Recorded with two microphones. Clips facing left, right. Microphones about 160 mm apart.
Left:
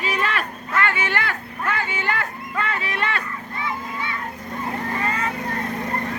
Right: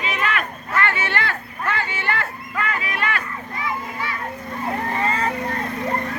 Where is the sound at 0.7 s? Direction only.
15° left (ahead or behind).